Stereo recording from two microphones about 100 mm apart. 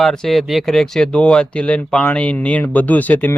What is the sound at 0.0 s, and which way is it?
Speech, 5° left (ahead or behind).